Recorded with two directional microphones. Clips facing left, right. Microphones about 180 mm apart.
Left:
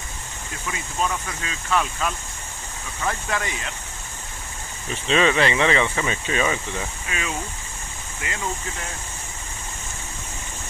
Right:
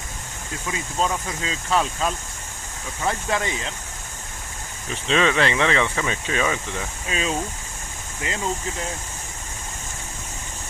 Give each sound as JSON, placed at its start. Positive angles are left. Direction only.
{"t": 0.7, "sound": "speech", "side_deg": -25}
{"t": 5.0, "sound": "speech", "side_deg": 5}
{"t": 7.1, "sound": "speech", "side_deg": -30}